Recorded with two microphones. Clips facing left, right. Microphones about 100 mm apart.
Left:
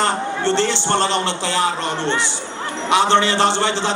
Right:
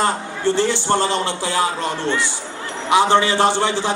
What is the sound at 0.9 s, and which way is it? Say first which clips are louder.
Speech: left 1 dB; 70° left (ahead or behind).